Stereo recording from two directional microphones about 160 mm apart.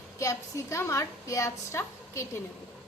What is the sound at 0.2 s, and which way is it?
A woman's voice, 20° left (ahead or behind).